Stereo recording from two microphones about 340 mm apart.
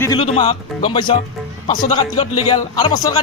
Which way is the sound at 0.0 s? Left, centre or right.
Centre.